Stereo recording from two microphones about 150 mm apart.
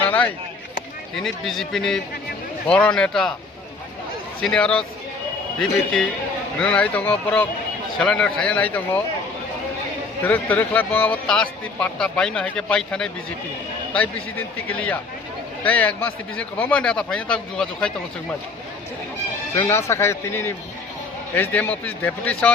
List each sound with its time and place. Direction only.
0.0 s a sound: 10° left (ahead or behind)
1.1 s speech: centre (ahead or behind)
4.4 s a man's voice: 5° left (ahead or behind)
10.2 s a man's voice: 10° left (ahead or behind)
19.5 s a man's voice: 20° left (ahead or behind)